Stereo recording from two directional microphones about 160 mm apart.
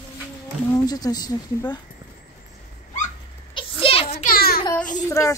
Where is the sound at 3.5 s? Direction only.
35° left (ahead or behind).